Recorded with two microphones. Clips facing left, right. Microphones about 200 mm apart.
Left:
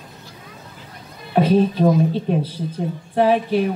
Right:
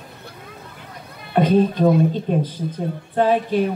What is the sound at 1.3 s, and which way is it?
A woman's voice, 5° left (ahead or behind).